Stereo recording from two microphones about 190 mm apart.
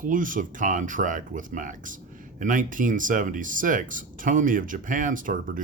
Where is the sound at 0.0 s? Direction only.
45° right (ahead or behind).